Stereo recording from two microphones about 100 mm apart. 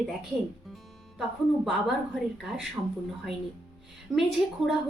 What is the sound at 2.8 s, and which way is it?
Speech, 25° right (ahead or behind).